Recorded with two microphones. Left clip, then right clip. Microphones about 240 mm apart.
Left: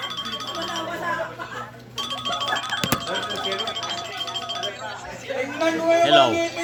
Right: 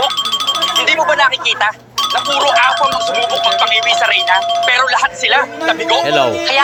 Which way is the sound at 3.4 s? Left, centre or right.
Right.